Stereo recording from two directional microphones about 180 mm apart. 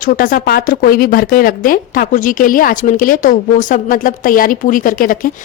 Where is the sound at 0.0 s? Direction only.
50° left (ahead or behind).